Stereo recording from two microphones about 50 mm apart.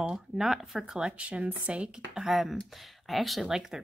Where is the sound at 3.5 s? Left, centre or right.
Centre.